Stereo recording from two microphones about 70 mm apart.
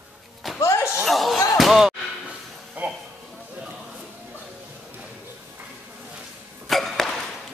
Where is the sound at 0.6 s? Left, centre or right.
Left.